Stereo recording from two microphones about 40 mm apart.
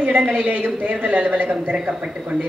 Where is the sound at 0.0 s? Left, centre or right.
Right.